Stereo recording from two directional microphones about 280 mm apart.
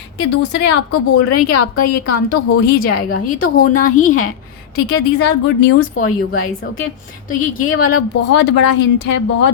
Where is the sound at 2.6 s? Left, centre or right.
Left.